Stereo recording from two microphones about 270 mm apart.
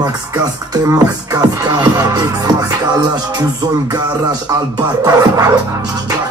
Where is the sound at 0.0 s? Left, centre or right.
Centre.